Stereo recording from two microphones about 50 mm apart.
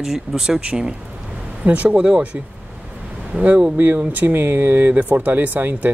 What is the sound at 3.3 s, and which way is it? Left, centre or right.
Speech, right.